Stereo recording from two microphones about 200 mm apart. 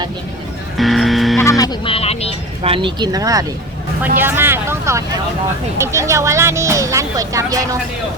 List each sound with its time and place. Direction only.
0.8 s music: centre (ahead or behind)
1.4 s music: 15° left (ahead or behind)
2.6 s speech: 25° right (ahead or behind)